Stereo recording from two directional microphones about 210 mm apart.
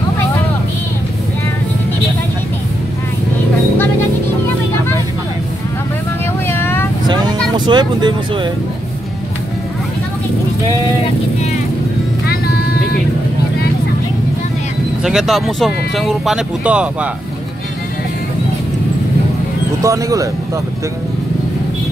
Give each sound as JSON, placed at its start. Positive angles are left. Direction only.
{"t": 6.5, "sound": "vehicle", "side_deg": 10}
{"t": 7.1, "sound": "vehicle", "side_deg": -20}
{"t": 15.0, "sound": "speech", "side_deg": 0}
{"t": 19.8, "sound": "speech", "side_deg": -15}